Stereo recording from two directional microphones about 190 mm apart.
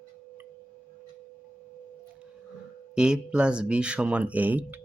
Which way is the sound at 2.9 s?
5° right (ahead or behind).